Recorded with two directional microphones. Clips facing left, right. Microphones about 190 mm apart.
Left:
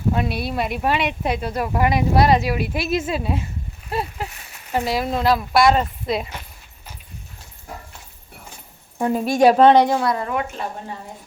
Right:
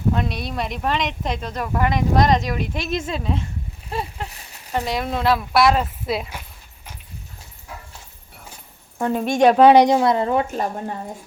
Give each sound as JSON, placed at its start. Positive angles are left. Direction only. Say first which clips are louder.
{"t": 0.1, "sound": "a woman's voice", "louder": "left 2 dB", "side_deg": 5}
{"t": 9.0, "sound": "speech", "louder": "left 1 dB", "side_deg": 10}
{"t": 9.6, "sound": "speech", "louder": "right 2 dB", "side_deg": -15}
{"t": 10.5, "sound": "speech", "louder": "right 5 dB", "side_deg": -45}